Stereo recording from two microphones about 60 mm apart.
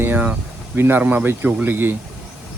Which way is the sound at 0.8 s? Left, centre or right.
Right.